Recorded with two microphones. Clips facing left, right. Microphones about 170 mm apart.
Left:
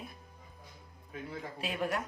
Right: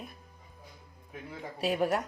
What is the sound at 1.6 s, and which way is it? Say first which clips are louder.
Speech: right 6 dB; 40° right (ahead or behind).